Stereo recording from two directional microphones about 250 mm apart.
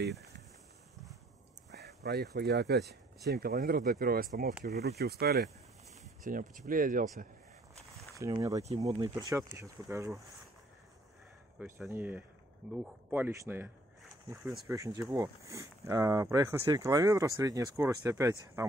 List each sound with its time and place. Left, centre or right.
1.7 s speech: right
8.2 s speech: centre
8.6 s speech: right
11.6 s speech: centre